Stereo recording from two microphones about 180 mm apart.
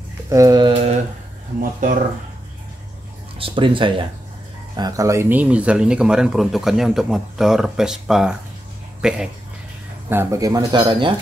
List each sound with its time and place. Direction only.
0.3 s speech: 20° right (ahead or behind)
1.6 s speech: 50° right (ahead or behind)
3.3 s speech: 30° right (ahead or behind); by 9.3 s 5° right (ahead or behind)
10.0 s speech: 15° right (ahead or behind)